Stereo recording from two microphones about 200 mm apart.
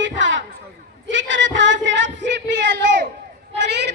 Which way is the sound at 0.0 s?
65° right (ahead or behind).